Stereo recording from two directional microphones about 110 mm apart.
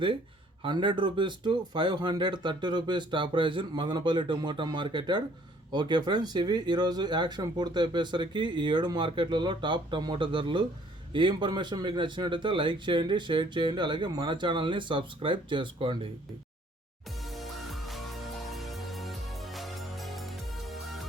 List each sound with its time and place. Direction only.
0.6 s speech: 50° right (ahead or behind)
17.2 s music: centre (ahead or behind)